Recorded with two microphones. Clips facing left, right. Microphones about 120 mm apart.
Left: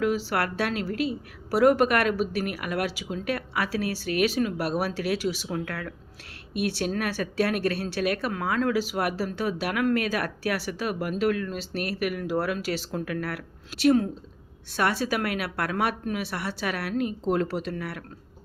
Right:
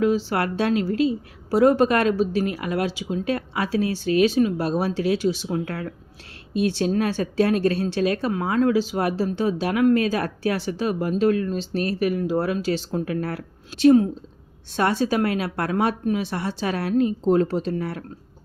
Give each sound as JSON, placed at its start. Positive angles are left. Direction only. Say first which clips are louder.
{"t": 0.0, "sound": "a woman's voice", "louder": "right 4 dB", "side_deg": -25}